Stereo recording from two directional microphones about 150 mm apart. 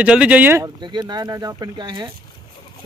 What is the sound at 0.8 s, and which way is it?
Speech, 30° right (ahead or behind).